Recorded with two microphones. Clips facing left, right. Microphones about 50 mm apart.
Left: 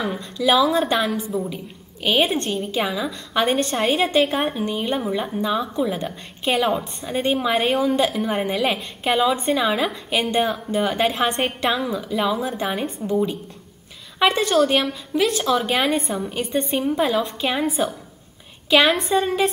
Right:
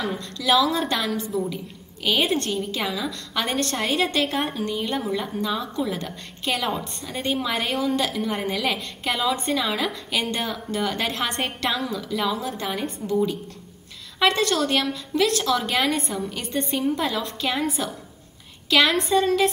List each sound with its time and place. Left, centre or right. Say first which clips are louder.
0.0 s a woman's voice: left 4 dB; centre
1.2 s a woman's voice: left 1 dB; centre
8.5 s a woman's voice: left 4 dB; centre
9.0 s a woman's voice: left 5 dB; left
12.1 s a woman's voice: left 3 dB; centre
14.2 s a woman's voice: left 3 dB; centre